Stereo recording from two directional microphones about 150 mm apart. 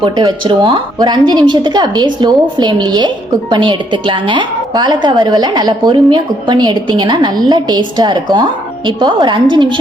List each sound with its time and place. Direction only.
0.0 s a woman's voice: 30° right (ahead or behind)